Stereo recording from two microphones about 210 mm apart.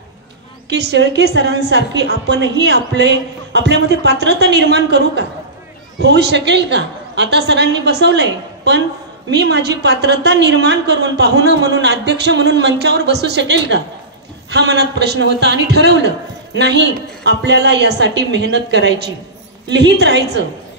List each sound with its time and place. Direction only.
0.7 s a woman's voice: 55° right (ahead or behind)